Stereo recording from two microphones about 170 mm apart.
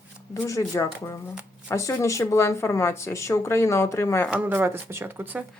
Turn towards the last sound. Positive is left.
turn(degrees=-10)  # may be behind; listen again after turning